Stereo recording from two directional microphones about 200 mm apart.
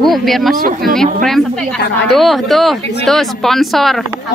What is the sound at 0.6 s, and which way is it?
Speech, 45° right (ahead or behind).